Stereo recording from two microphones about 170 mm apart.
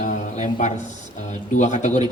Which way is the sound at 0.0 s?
45° left (ahead or behind).